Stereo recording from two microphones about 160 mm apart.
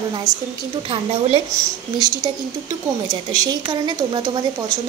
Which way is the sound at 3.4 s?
25° right (ahead or behind).